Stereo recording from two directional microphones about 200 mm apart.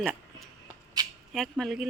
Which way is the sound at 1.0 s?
20° right (ahead or behind).